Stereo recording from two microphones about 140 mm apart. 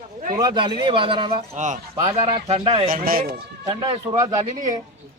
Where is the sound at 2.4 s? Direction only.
45° right (ahead or behind).